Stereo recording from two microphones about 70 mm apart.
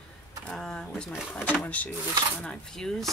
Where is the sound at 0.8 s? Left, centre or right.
Centre.